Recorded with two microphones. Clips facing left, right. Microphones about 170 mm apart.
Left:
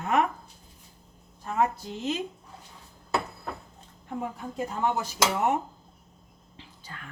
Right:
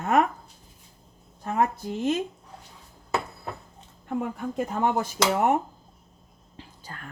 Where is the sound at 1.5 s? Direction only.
55° right (ahead or behind).